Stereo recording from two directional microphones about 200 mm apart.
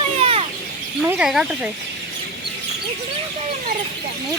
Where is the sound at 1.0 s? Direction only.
5° right (ahead or behind).